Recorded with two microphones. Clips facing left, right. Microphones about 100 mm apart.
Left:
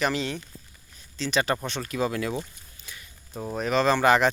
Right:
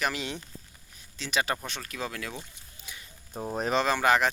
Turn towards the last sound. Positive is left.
turn(degrees=0)  # may be behind; listen again after turning